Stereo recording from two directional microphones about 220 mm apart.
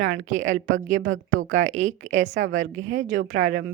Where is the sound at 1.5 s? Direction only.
60° right (ahead or behind).